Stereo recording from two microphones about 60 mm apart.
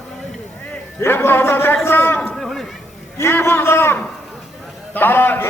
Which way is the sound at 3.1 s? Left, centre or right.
Left.